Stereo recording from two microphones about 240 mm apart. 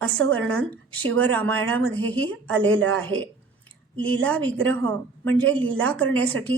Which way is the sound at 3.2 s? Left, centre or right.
Centre.